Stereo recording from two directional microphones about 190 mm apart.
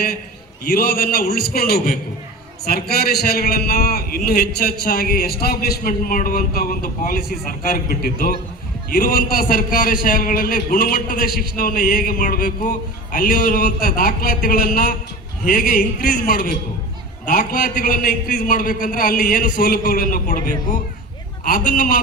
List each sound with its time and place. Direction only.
0.7 s a man's voice: 50° left (ahead or behind)